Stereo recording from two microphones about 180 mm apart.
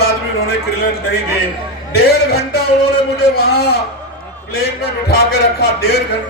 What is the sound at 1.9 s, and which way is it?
A man's voice, 65° left (ahead or behind).